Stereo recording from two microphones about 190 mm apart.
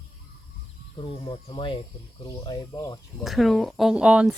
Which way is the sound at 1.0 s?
25° left (ahead or behind).